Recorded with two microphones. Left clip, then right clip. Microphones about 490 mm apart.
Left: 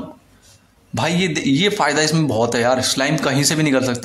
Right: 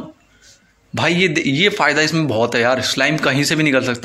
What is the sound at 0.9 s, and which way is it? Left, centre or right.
A man's voice, left.